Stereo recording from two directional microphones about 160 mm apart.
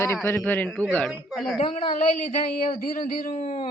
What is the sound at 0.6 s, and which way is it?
Speech, centre (ahead or behind).